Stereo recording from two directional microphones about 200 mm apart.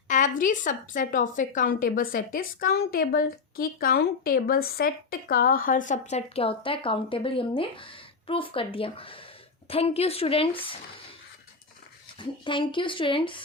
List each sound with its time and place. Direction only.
0.1 s a woman's voice: 40° left (ahead or behind)
12.2 s a woman's voice: 25° left (ahead or behind)